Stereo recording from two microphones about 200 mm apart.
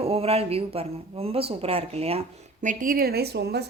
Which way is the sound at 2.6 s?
40° right (ahead or behind).